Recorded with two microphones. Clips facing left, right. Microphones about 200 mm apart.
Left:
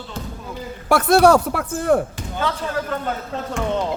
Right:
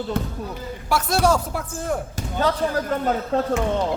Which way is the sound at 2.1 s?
40° right (ahead or behind).